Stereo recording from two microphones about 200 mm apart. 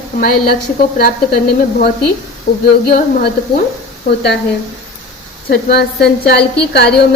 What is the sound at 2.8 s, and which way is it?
Speech, 45° left (ahead or behind).